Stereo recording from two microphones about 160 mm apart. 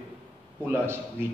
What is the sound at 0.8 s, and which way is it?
Speech, 15° right (ahead or behind).